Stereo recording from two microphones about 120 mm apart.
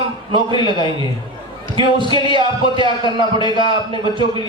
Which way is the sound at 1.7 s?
45° right (ahead or behind).